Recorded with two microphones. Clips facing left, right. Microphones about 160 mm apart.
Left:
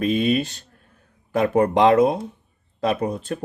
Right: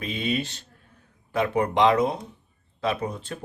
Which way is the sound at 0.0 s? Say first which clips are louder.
Left 8 dB; 45° left (ahead or behind).